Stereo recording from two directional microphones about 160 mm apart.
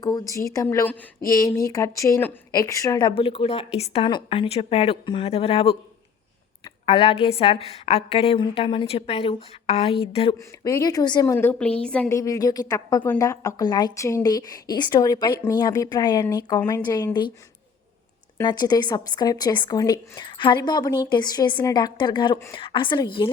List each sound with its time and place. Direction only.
0.0 s a woman's voice: 20° left (ahead or behind); by 5.7 s 35° left (ahead or behind)
6.8 s a woman's voice: 40° left (ahead or behind)
10.3 s a woman's voice: 20° left (ahead or behind)
11.3 s a woman's voice: 10° left (ahead or behind)
12.1 s a woman's voice: 20° left (ahead or behind)
18.4 s a woman's voice: 25° left (ahead or behind)